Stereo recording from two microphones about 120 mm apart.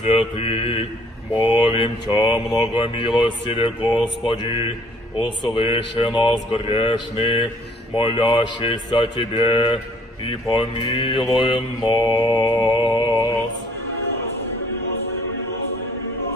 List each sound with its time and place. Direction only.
0.4 s mantra: 55° left (ahead or behind)